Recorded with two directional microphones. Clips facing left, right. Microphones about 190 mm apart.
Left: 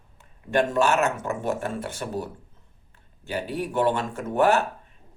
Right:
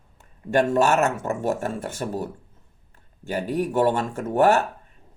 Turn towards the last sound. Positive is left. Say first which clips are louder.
# right 2 dB
turn(degrees=-45)  # may be behind; listen again after turning